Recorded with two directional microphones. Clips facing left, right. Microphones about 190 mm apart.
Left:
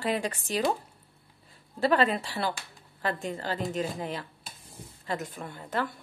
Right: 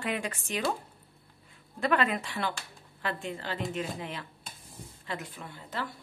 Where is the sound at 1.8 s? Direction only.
30° left (ahead or behind); by 5.8 s 50° left (ahead or behind).